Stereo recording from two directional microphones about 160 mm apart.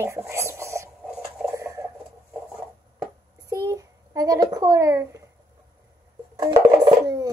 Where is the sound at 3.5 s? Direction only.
20° right (ahead or behind).